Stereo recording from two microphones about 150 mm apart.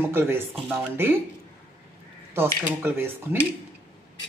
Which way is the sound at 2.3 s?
15° right (ahead or behind).